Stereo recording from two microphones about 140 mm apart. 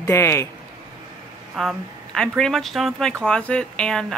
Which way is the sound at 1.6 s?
Centre (ahead or behind).